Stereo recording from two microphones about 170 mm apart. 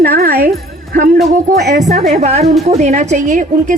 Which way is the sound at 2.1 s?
40° right (ahead or behind).